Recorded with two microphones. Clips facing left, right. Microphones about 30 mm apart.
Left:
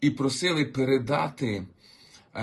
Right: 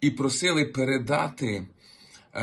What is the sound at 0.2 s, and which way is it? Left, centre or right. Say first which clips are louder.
Speech: right 1 dB; right.